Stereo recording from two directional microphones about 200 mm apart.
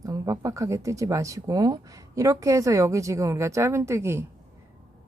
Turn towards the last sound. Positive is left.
turn(degrees=-15)  # may be behind; listen again after turning